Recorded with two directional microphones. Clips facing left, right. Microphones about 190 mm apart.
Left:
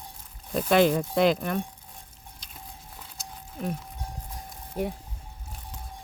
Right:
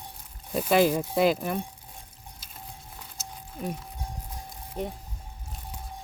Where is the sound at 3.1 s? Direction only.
5° right (ahead or behind).